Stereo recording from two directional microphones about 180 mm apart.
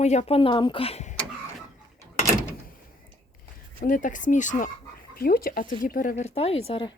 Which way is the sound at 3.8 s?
50° left (ahead or behind).